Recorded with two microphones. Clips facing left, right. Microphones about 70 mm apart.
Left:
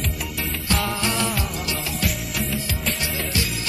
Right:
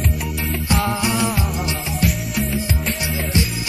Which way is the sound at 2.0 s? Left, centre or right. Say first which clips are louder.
Right 7 dB; centre.